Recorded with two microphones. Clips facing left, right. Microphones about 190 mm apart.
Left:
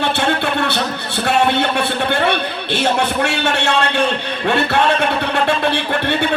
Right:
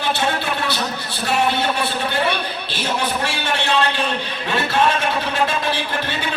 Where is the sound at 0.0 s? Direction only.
60° left (ahead or behind).